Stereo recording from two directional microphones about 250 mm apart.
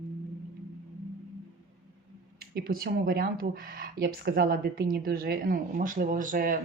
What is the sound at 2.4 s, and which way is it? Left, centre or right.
Speech, right.